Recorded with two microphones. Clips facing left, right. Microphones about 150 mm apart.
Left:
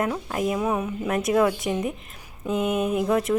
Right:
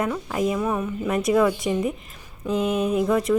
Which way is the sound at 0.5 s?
10° left (ahead or behind).